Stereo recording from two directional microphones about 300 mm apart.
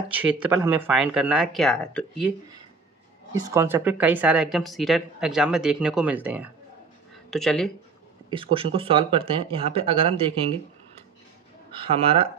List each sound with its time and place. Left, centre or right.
0.1 s speech: centre
3.5 s speech: centre
8.3 s speech: centre
11.7 s speech: centre